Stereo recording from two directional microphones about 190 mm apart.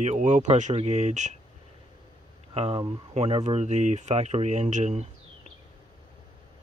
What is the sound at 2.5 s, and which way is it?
Speech, 35° right (ahead or behind).